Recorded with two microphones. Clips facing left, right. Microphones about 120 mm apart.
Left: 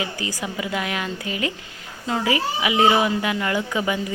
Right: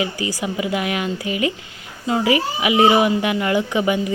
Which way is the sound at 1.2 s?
40° left (ahead or behind).